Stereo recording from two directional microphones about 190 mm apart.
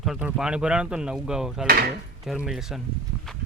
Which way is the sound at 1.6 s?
50° right (ahead or behind).